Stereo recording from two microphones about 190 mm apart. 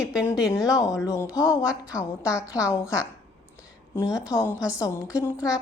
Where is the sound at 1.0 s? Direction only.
15° left (ahead or behind).